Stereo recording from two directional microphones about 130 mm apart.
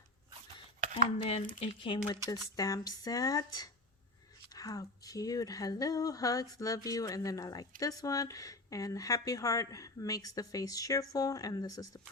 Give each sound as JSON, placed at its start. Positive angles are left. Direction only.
{"t": 1.2, "sound": "speech", "side_deg": 50}
{"t": 2.2, "sound": "a woman's voice", "side_deg": 25}